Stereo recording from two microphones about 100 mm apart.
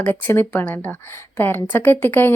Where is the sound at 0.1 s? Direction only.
20° left (ahead or behind).